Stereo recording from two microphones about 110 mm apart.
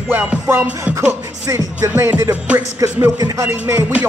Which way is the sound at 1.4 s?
25° right (ahead or behind).